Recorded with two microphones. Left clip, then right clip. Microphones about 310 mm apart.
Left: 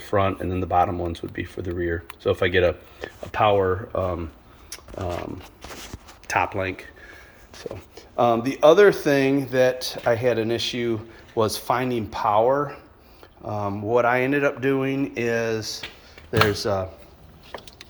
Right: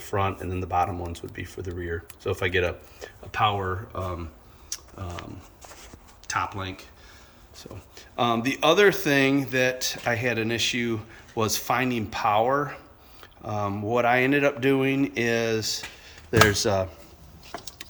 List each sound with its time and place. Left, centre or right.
0.0 s speech: left
4.7 s shuffling cards: centre
6.4 s speech: centre
8.4 s speech: centre
12.1 s speech: centre
13.4 s speech: centre
16.6 s speech: centre